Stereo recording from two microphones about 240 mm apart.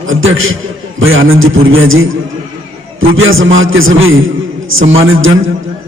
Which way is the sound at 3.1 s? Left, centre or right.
Right.